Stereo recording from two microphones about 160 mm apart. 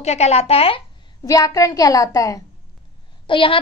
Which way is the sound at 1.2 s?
20° left (ahead or behind).